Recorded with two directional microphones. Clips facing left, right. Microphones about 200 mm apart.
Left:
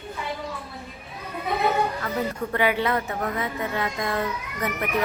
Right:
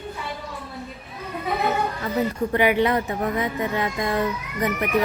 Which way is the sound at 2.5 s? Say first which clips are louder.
Right 3 dB; 15° right (ahead or behind).